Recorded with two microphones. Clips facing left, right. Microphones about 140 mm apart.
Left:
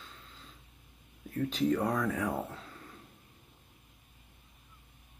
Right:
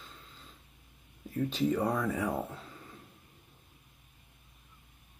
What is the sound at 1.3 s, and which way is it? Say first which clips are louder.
Speech: even; 5° right (ahead or behind).